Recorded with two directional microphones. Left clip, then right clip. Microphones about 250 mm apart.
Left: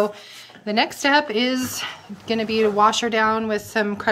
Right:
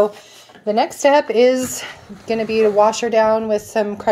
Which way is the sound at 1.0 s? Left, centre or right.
Left.